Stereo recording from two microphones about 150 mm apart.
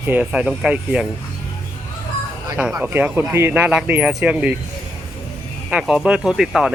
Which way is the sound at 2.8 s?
10° right (ahead or behind).